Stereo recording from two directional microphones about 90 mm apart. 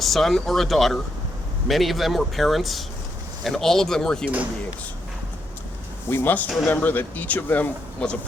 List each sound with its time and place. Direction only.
0.0 s speech: centre (ahead or behind)
6.1 s speech: 25° left (ahead or behind)